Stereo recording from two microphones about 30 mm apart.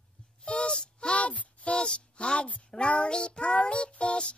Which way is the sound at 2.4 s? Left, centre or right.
Left.